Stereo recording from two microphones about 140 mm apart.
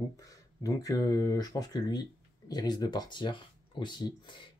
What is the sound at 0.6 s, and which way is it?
Speech, 25° left (ahead or behind).